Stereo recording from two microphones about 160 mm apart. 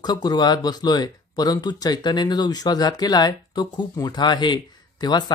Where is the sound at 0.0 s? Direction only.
25° left (ahead or behind).